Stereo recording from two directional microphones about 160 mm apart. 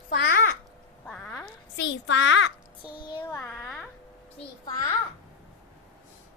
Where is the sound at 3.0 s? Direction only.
30° left (ahead or behind).